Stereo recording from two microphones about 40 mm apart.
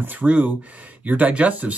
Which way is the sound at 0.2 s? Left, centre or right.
Right.